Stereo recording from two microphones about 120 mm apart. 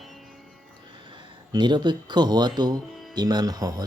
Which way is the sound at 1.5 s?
40° right (ahead or behind).